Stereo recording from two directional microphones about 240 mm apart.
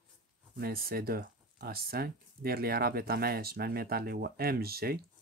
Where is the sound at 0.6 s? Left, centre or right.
Right.